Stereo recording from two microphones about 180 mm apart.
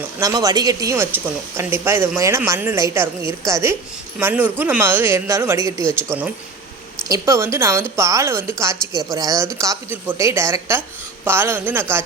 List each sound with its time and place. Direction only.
0.2 s speech: 20° right (ahead or behind)